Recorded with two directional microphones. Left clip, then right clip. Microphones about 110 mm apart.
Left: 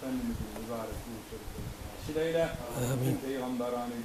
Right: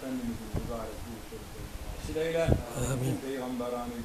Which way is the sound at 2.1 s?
10° right (ahead or behind).